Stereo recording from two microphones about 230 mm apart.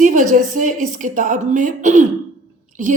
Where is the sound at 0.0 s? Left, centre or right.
Right.